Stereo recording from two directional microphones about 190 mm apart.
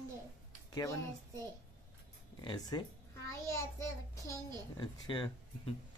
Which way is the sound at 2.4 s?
20° left (ahead or behind).